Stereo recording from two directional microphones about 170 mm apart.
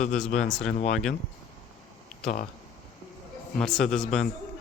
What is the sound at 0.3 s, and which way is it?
Speech, 5° left (ahead or behind).